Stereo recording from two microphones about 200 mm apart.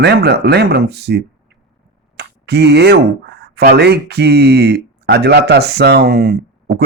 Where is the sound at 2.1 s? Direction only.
55° right (ahead or behind).